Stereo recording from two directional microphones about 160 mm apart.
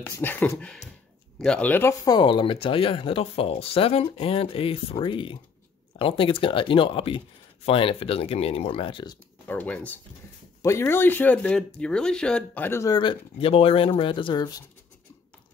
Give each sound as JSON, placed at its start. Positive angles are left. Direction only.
{"t": 0.0, "sound": "speech", "side_deg": 10}
{"t": 9.5, "sound": "speech", "side_deg": 10}